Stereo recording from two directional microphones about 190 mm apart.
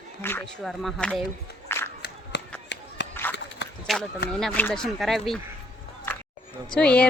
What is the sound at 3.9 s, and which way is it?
Speech, centre (ahead or behind).